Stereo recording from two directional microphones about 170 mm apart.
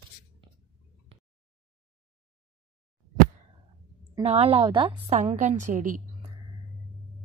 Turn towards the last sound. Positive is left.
turn(degrees=-50)  # may be behind; listen again after turning